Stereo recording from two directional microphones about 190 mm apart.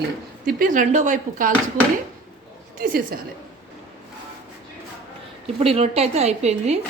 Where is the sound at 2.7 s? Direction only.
45° right (ahead or behind).